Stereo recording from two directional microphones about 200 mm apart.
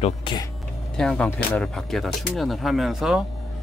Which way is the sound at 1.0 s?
5° left (ahead or behind).